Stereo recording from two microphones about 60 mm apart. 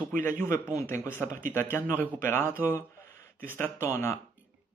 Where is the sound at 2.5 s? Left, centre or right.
Left.